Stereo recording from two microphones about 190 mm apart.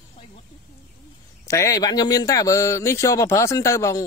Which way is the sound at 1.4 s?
15° left (ahead or behind).